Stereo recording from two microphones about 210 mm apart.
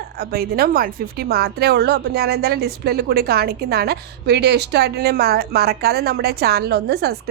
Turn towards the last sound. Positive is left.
turn(degrees=-50)  # may be behind; listen again after turning